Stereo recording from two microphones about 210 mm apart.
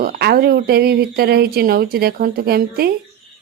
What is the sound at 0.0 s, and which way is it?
A woman's voice, 45° right (ahead or behind).